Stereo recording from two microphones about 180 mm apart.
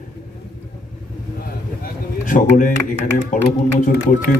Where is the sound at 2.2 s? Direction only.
50° left (ahead or behind).